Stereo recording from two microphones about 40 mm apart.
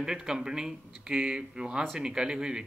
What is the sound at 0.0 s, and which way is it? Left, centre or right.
Speech, centre.